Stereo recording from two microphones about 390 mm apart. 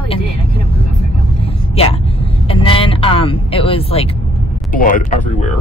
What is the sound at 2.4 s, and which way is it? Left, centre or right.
Speech, centre.